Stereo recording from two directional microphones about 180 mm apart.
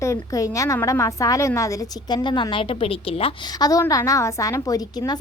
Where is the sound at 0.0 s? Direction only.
15° left (ahead or behind).